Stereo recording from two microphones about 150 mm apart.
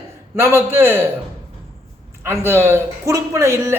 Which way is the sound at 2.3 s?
15° right (ahead or behind).